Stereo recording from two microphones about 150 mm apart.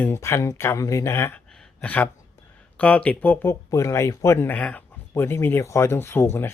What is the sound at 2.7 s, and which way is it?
Speech, 10° left (ahead or behind).